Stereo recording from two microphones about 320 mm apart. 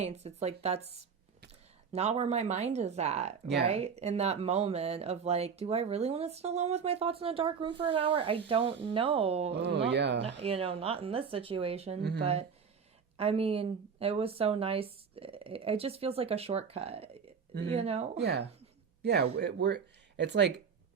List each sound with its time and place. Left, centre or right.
0.0 s speech: centre
9.6 s speech: right
10.4 s speech: centre
18.2 s speech: right